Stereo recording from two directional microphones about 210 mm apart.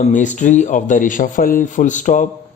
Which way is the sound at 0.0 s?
35° left (ahead or behind).